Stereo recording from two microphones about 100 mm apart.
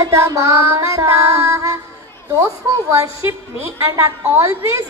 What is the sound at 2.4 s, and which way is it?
A woman's voice, 25° right (ahead or behind).